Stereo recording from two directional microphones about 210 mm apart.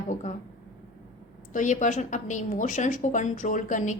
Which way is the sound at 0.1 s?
35° left (ahead or behind).